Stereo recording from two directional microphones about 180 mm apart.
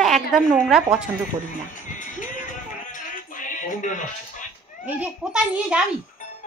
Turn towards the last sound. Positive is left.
turn(degrees=-5)  # may be behind; listen again after turning